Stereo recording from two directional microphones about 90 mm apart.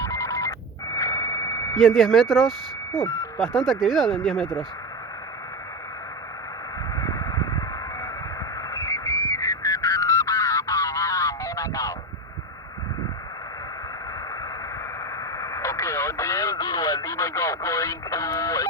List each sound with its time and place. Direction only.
0.0 s telephone: 35° left (ahead or behind)
0.9 s a sound: 45° left (ahead or behind)
1.8 s speech: centre (ahead or behind)
3.0 s speech: 35° left (ahead or behind)
3.3 s speech: 5° left (ahead or behind)
6.9 s a sound: 40° left (ahead or behind)
8.7 s frog: 40° left (ahead or behind)
15.4 s radio: 35° left (ahead or behind)